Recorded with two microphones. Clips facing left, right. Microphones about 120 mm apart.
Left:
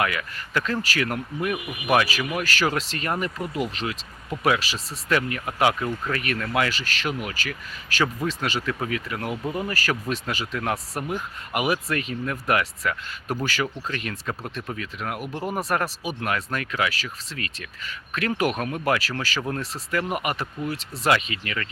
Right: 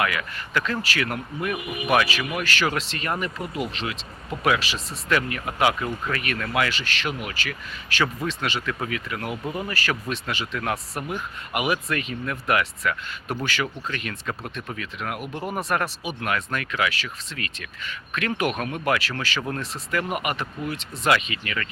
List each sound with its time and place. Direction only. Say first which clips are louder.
0.0 s speech: even; 35° left (ahead or behind)